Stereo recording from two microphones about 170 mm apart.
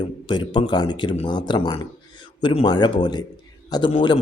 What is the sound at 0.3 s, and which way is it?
Speech, 25° left (ahead or behind).